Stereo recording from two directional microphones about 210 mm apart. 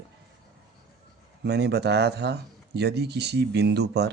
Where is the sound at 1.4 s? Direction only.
50° right (ahead or behind).